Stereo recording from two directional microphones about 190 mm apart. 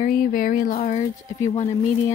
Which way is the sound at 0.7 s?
35° left (ahead or behind).